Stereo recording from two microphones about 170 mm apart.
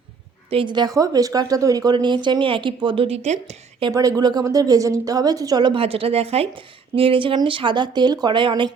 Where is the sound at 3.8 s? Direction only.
20° right (ahead or behind).